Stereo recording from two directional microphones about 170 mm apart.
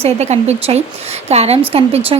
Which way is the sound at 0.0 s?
40° right (ahead or behind).